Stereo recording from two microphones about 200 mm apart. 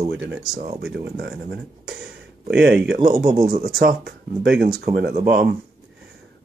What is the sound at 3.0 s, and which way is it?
Speech, 45° right (ahead or behind).